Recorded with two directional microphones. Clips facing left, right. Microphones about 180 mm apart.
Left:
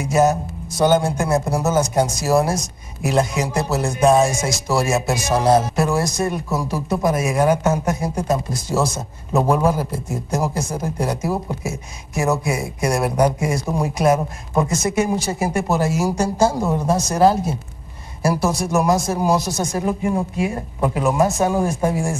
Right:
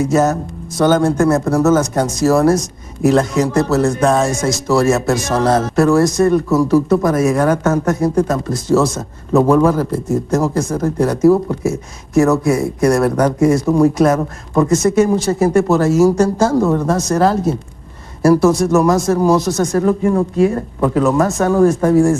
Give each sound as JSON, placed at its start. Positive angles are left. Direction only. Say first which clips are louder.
{"t": 0.0, "sound": "speech", "louder": "right 3 dB", "side_deg": 15}